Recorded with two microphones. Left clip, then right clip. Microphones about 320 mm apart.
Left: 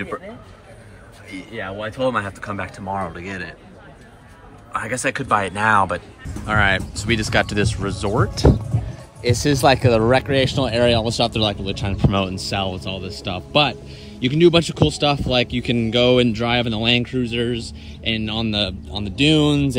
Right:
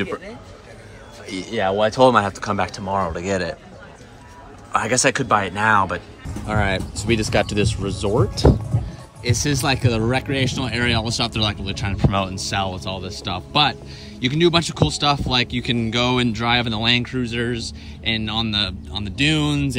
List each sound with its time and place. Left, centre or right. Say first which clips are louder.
1.3 s speech: right 9 dB; centre
4.7 s speech: right 4 dB; centre
8.4 s music: even; centre
9.6 s speech: left 6 dB; centre
11.3 s speech: left 2 dB; centre